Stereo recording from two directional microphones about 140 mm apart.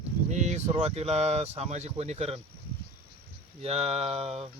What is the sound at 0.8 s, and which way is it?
Speech, 45° right (ahead or behind).